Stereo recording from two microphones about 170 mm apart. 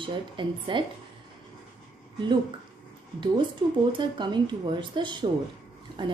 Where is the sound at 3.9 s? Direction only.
25° right (ahead or behind).